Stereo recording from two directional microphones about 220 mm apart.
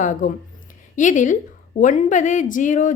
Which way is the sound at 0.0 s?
35° left (ahead or behind).